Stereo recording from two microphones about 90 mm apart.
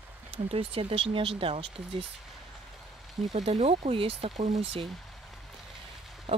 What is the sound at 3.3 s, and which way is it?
Speech, 90° right.